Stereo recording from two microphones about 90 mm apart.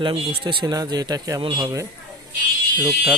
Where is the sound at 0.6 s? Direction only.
45° right (ahead or behind).